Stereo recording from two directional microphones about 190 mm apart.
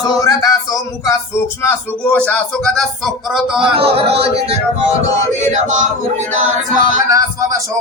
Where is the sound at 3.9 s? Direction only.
30° right (ahead or behind).